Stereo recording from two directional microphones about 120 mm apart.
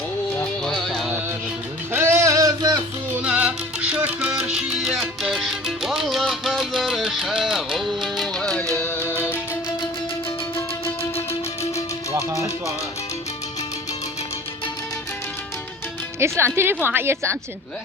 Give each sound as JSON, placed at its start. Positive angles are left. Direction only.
{"t": 0.3, "sound": "music", "side_deg": 5}
{"t": 1.9, "sound": "a sound", "side_deg": -20}
{"t": 3.2, "sound": "music", "side_deg": -10}
{"t": 11.0, "sound": "music", "side_deg": 25}
{"t": 16.4, "sound": "a woman's voice", "side_deg": -20}